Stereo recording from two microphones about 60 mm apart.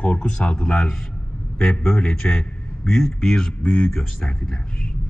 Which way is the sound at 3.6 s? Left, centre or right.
Left.